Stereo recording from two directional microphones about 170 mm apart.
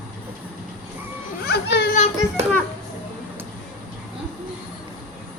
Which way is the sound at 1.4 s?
75° left (ahead or behind).